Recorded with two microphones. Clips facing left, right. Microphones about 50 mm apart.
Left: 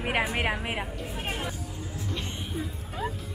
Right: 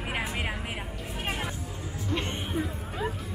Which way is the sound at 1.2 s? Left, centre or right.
Centre.